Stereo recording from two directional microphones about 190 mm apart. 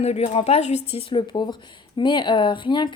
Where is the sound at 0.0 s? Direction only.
35° left (ahead or behind).